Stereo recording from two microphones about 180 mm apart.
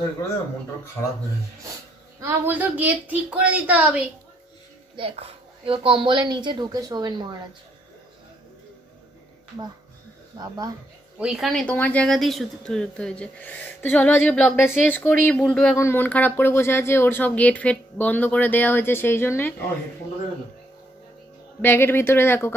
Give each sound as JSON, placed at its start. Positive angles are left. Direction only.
{"t": 2.1, "sound": "a woman's voice", "side_deg": -10}
{"t": 4.9, "sound": "a woman's voice", "side_deg": -30}
{"t": 11.1, "sound": "speech", "side_deg": 0}
{"t": 21.5, "sound": "speech", "side_deg": 10}